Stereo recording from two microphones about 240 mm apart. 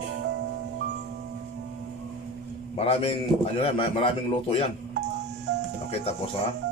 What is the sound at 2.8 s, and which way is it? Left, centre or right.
A man's voice, left.